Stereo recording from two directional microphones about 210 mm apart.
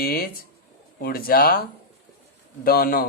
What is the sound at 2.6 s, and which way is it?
Speech, 45° left (ahead or behind).